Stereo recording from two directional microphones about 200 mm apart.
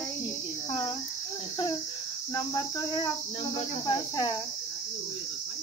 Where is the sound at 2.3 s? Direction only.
20° left (ahead or behind).